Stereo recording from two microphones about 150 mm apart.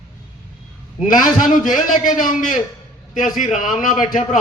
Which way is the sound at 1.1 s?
60° left (ahead or behind).